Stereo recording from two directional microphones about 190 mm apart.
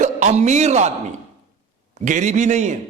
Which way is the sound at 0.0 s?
40° right (ahead or behind).